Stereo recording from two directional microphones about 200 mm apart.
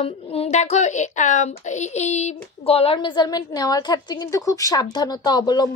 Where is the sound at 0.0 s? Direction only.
30° left (ahead or behind).